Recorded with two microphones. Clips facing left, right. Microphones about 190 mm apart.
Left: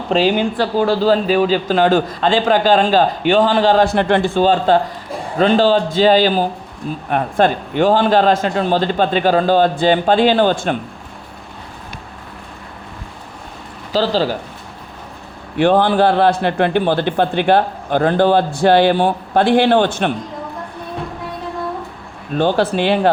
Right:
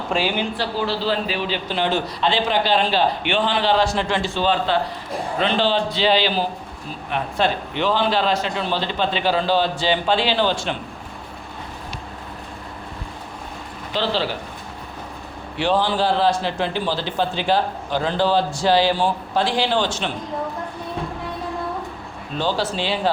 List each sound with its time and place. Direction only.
0.1 s speech: 40° left (ahead or behind)
13.9 s speech: 40° left (ahead or behind)
15.5 s a man's voice: 55° left (ahead or behind)
22.4 s a man's voice: 55° left (ahead or behind)